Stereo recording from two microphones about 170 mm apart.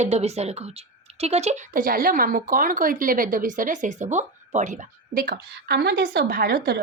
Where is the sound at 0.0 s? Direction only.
40° right (ahead or behind).